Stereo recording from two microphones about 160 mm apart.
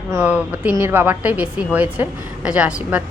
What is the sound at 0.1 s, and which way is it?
A woman's voice, 10° right (ahead or behind).